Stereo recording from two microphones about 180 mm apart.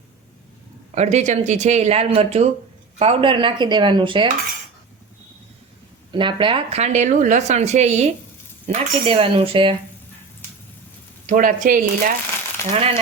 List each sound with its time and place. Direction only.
0.9 s speech: 40° right (ahead or behind)
6.1 s speech: 25° right (ahead or behind)
11.3 s speech: 45° right (ahead or behind)
12.6 s speech: 15° left (ahead or behind)